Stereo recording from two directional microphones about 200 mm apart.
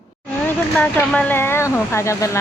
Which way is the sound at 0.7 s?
5° left (ahead or behind).